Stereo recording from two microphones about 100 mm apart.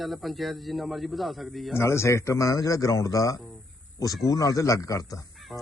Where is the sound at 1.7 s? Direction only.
25° left (ahead or behind).